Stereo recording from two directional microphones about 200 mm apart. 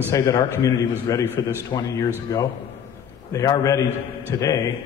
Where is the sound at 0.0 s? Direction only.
15° left (ahead or behind).